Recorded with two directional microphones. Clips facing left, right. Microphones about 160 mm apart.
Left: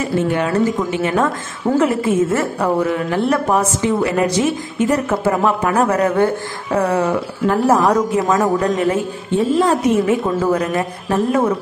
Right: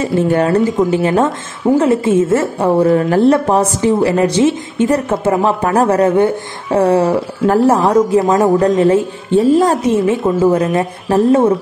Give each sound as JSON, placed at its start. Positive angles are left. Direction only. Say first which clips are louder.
{"t": 0.0, "sound": "a woman's voice", "louder": "right 4 dB", "side_deg": -35}
{"t": 2.9, "sound": "a woman's voice", "louder": "right 7 dB", "side_deg": -40}